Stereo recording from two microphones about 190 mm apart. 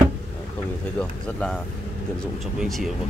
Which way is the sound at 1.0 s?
5° left (ahead or behind).